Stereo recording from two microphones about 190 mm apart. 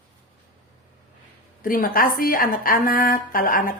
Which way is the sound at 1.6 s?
50° left (ahead or behind).